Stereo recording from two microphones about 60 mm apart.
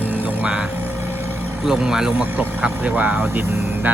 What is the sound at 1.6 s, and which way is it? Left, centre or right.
Speech, centre.